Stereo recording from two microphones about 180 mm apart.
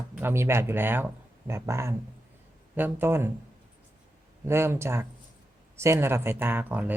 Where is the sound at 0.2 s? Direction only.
15° right (ahead or behind).